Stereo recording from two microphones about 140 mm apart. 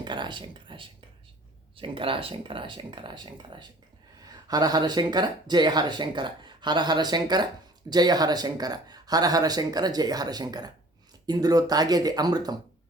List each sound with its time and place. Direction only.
0.0 s speech: 35° right (ahead or behind)